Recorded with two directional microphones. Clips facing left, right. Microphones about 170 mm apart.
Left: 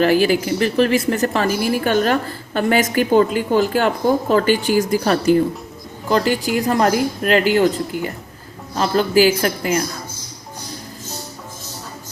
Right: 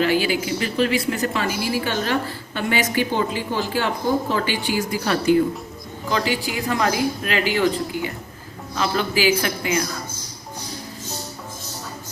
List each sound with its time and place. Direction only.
0.0 s a woman's voice: 45° left (ahead or behind)